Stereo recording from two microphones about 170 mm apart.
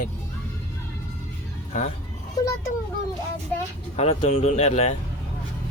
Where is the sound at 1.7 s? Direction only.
45° left (ahead or behind).